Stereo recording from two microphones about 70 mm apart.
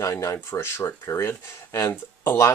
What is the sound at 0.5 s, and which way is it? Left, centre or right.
Speech, left.